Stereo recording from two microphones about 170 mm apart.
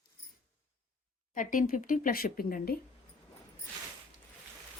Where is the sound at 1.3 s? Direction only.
50° left (ahead or behind).